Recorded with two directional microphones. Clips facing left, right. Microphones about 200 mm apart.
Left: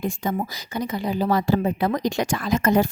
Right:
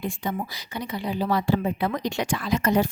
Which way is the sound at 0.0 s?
45° left (ahead or behind).